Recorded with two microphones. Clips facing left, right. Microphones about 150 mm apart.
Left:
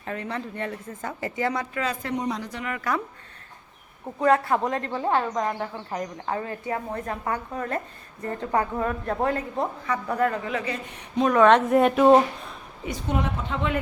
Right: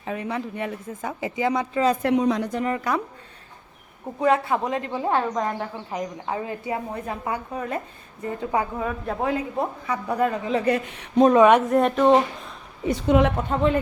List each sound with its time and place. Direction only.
0.0 s speech: 10° right (ahead or behind)
2.0 s a woman's voice: 65° right (ahead or behind)
2.6 s speech: 35° right (ahead or behind)
4.2 s speech: centre (ahead or behind)
10.7 s speech: 90° right
11.6 s speech: centre (ahead or behind)
12.9 s a woman's voice: 85° right
13.5 s speech: 35° right (ahead or behind)